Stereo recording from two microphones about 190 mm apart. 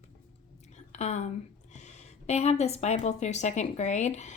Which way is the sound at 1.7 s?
40° left (ahead or behind).